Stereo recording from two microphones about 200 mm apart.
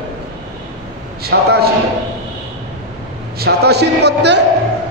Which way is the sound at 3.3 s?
50° right (ahead or behind).